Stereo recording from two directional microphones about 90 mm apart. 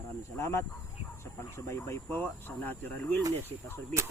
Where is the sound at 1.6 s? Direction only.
35° left (ahead or behind).